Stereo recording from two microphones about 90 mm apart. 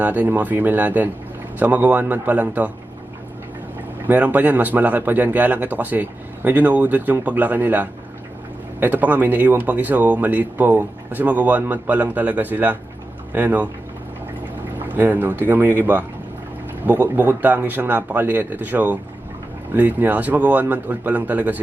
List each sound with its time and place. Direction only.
0.0 s speech: 20° right (ahead or behind)
4.0 s speech: 20° right (ahead or behind)
14.8 s speech: 20° right (ahead or behind)